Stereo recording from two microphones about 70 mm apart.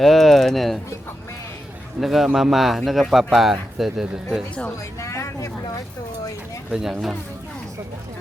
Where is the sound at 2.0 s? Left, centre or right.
Centre.